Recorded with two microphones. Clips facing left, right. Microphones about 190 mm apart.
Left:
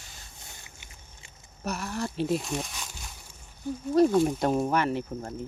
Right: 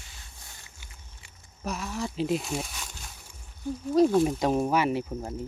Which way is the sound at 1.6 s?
Centre (ahead or behind).